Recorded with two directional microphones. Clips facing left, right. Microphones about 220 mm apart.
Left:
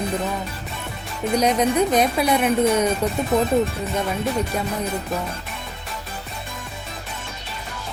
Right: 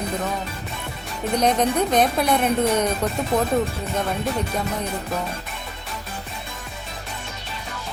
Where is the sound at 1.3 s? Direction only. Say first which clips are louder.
Left 1 dB; 10° left (ahead or behind).